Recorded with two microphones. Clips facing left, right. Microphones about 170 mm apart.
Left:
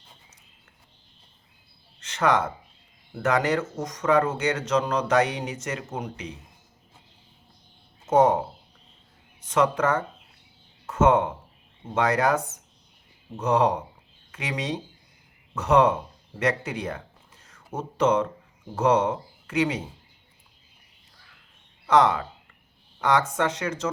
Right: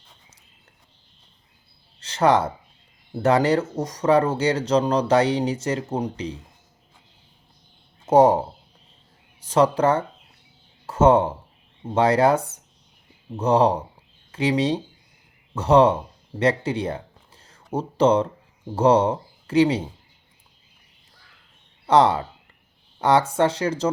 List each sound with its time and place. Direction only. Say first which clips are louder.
2.0 s speech: right 4 dB; 35° right (ahead or behind)
8.0 s speech: right 4 dB; 35° right (ahead or behind)
21.8 s speech: right 3 dB; 30° right (ahead or behind)